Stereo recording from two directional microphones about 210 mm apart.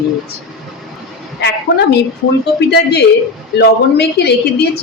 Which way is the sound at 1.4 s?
55° left (ahead or behind).